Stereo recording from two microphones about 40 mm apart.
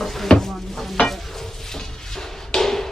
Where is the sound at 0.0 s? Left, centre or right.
Centre.